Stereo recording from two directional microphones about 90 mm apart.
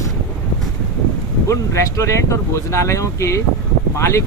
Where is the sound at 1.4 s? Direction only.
35° left (ahead or behind).